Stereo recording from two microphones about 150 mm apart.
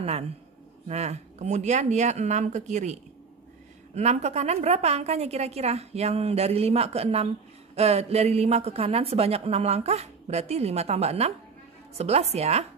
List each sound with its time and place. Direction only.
0.8 s speech: 45° right (ahead or behind)